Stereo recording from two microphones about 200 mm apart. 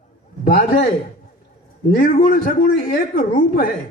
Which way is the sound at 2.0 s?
45° left (ahead or behind).